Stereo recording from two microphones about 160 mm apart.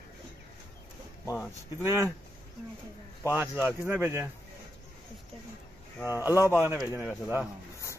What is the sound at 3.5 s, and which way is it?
Speech, 10° right (ahead or behind).